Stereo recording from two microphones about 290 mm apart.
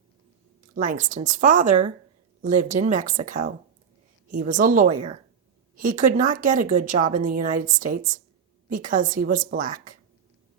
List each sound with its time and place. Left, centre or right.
0.8 s a woman's voice: right